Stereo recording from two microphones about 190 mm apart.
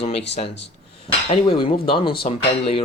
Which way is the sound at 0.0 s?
30° left (ahead or behind).